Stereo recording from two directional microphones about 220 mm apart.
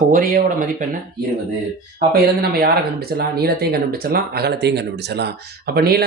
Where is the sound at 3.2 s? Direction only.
45° right (ahead or behind).